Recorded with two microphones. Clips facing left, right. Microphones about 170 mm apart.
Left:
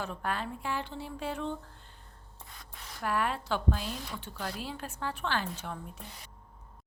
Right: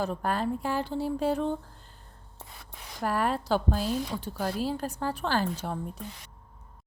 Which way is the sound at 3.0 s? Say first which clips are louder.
Right 4 dB; 40° right (ahead or behind).